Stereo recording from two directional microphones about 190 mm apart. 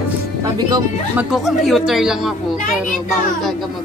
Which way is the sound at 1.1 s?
Centre (ahead or behind).